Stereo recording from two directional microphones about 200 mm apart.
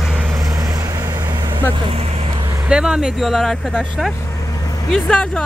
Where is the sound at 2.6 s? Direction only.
5° right (ahead or behind).